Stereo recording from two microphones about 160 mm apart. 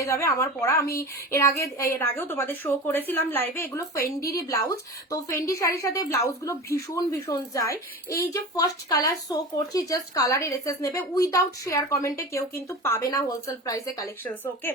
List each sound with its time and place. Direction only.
0.0 s a woman's voice: 15° left (ahead or behind)
14.3 s a woman's voice: 10° left (ahead or behind)